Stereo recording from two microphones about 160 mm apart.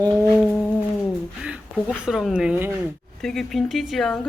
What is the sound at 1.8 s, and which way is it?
Speech, 5° right (ahead or behind).